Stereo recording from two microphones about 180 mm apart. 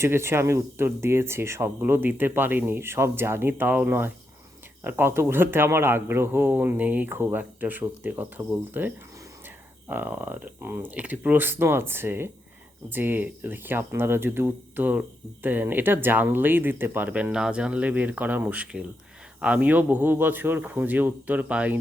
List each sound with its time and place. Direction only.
0.0 s speech: 15° right (ahead or behind)
9.9 s speech: 10° right (ahead or behind)